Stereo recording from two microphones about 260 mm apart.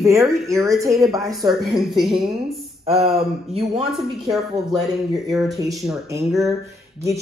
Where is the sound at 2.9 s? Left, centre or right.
Right.